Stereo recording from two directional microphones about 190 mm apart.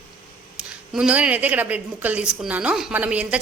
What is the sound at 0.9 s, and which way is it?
A woman's voice, 5° right (ahead or behind).